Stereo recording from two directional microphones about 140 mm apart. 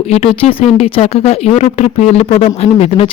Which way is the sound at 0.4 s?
50° left (ahead or behind).